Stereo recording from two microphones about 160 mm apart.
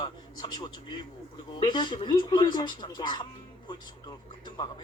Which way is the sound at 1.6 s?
30° left (ahead or behind).